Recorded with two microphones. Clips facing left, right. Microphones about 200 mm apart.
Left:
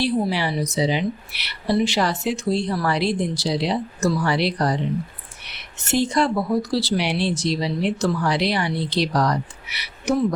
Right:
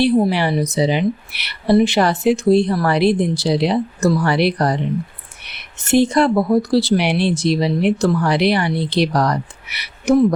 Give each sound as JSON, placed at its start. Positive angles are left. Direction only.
{"t": 0.0, "sound": "a woman's voice", "side_deg": -60}